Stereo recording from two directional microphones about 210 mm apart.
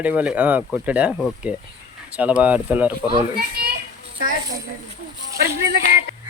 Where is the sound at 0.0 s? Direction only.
5° right (ahead or behind).